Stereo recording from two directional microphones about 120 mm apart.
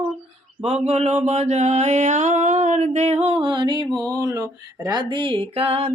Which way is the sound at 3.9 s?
30° right (ahead or behind).